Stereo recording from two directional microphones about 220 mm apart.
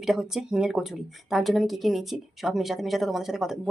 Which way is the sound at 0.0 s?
Centre (ahead or behind).